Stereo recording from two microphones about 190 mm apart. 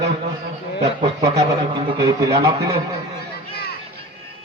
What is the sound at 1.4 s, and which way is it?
Speech, 25° right (ahead or behind).